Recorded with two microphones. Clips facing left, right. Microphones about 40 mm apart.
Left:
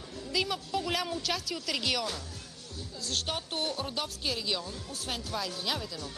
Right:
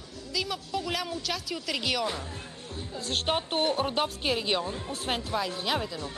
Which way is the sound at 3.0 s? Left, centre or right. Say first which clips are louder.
Right 6 dB; right.